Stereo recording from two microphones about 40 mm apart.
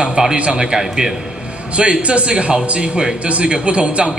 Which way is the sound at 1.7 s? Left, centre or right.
Right.